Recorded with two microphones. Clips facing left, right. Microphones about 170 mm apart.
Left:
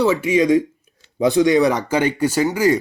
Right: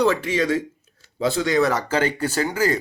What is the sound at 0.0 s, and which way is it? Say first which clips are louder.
Speech: left 4 dB; 10° left (ahead or behind).